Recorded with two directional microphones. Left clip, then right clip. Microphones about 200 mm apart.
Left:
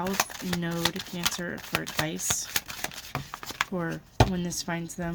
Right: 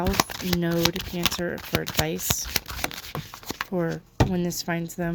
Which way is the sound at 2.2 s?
30° right (ahead or behind).